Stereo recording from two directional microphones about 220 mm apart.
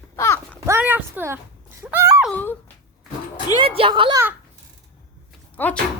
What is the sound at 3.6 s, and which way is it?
Speech, 25° right (ahead or behind).